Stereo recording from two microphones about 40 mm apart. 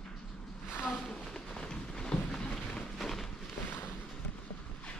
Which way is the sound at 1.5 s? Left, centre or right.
Centre.